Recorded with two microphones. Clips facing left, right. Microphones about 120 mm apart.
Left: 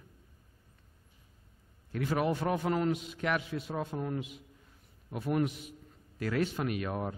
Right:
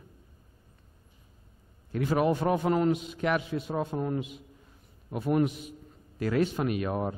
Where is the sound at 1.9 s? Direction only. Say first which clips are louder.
Right 5 dB; 25° right (ahead or behind).